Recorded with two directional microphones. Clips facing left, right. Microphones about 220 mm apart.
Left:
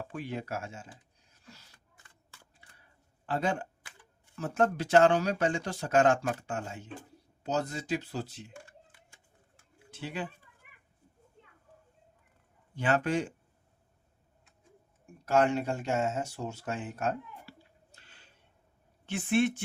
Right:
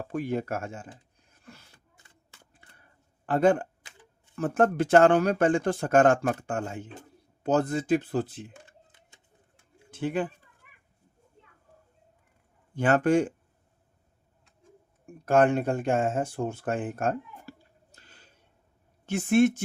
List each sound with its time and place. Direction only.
0.0 s speech: 45° right (ahead or behind)
1.3 s a sound: 55° right (ahead or behind)
4.4 s speech: 55° right (ahead or behind)
8.5 s typing: 20° right (ahead or behind)
9.9 s speech: 50° right (ahead or behind)
12.7 s speech: 50° right (ahead or behind)
15.0 s speech: 55° right (ahead or behind)